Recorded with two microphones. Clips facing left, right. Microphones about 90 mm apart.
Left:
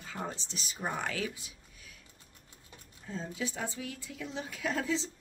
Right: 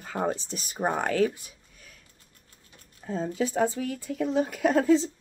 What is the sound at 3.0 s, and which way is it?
Speech, 50° right (ahead or behind).